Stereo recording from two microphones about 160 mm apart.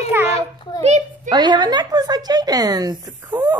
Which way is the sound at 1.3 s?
25° right (ahead or behind).